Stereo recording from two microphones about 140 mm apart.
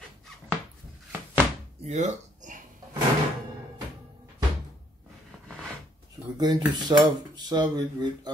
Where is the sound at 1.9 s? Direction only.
55° right (ahead or behind).